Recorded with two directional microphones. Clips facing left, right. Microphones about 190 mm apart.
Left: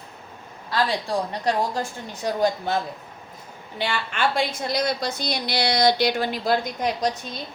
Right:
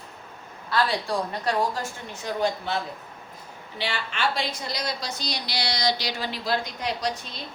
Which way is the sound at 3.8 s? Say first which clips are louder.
Left 3 dB; 50° left (ahead or behind).